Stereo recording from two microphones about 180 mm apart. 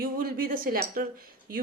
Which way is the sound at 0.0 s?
55° right (ahead or behind).